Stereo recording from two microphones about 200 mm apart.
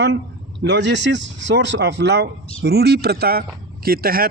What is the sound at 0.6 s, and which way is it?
A man's voice, 60° right (ahead or behind).